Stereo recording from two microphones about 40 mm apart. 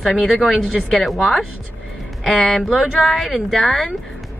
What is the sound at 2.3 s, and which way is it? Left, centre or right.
Speech, centre.